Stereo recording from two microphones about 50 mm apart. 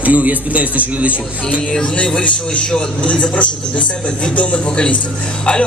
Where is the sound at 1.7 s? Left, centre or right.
Left.